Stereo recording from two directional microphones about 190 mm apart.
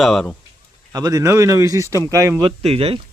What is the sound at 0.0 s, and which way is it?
Speech, centre (ahead or behind).